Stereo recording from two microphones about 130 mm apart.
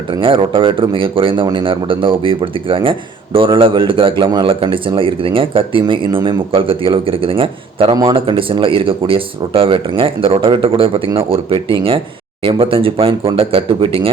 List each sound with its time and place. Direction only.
0.1 s a man's voice: 40° right (ahead or behind)